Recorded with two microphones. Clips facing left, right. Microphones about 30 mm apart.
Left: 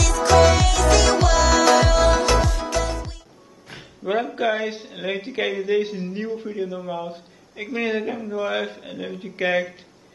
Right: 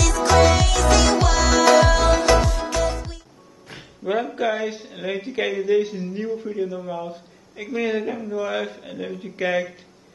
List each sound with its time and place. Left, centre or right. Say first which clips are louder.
0.0 s music: left 1 dB; centre
3.6 s a sound: even; centre
4.8 s speech: even; centre
5.7 s a man's voice: right 2 dB; left
6.2 s speech: right 3 dB; centre